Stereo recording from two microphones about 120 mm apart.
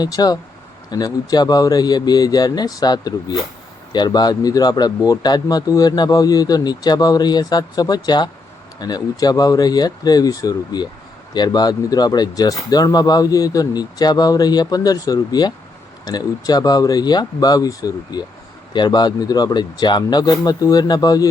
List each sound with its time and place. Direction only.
0.0 s speech: 35° left (ahead or behind)